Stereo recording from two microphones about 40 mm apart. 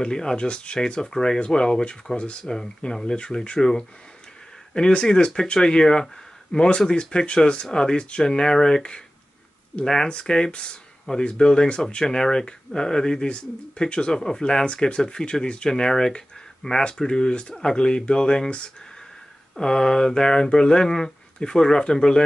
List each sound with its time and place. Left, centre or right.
0.0 s speech: centre
2.4 s speech: centre
10.0 s speech: left